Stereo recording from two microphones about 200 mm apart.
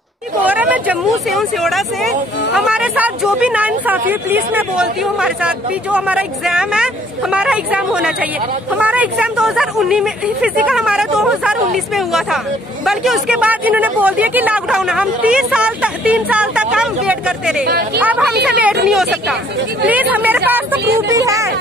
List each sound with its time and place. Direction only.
0.4 s speech: 10° right (ahead or behind)
17.6 s speech: 50° right (ahead or behind)
18.0 s speech: 5° right (ahead or behind)